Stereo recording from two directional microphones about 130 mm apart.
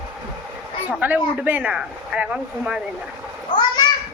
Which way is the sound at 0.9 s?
10° right (ahead or behind).